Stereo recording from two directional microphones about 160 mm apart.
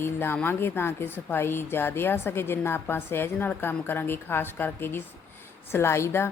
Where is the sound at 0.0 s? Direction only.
15° left (ahead or behind).